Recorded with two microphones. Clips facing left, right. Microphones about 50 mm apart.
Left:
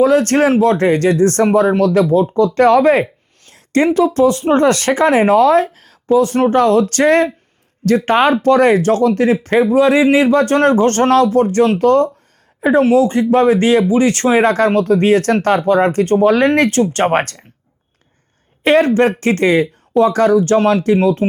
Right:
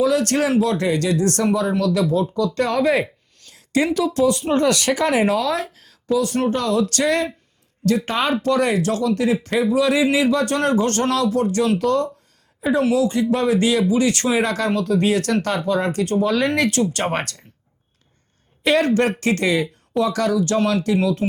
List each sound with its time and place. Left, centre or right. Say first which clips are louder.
0.0 s speech: left 7 dB; left
3.0 s a sound: left 6 dB; left
3.7 s speech: left 7 dB; left
18.6 s speech: left 6 dB; left